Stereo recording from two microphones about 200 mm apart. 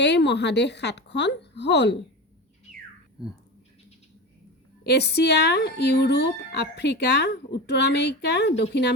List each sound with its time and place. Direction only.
0.0 s speech: 60° left (ahead or behind)
4.9 s speech: 55° left (ahead or behind)